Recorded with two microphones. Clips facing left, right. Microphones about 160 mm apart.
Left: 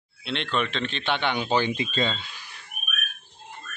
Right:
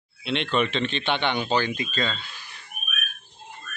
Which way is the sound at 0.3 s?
5° right (ahead or behind).